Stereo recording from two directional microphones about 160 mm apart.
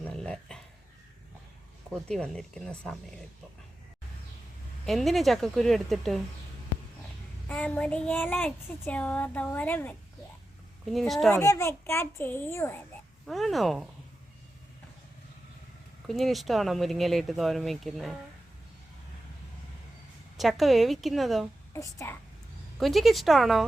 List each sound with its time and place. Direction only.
0.0 s dog: 5° left (ahead or behind)
1.9 s speech: 5° left (ahead or behind)
4.9 s speech: centre (ahead or behind)
7.4 s a child's voice: 10° left (ahead or behind)
11.3 s a child's voice: 20° left (ahead or behind)
13.2 s speech: centre (ahead or behind)
16.0 s speech: centre (ahead or behind)
20.3 s speech: centre (ahead or behind)
21.7 s speech: 20° left (ahead or behind)
22.8 s speech: centre (ahead or behind)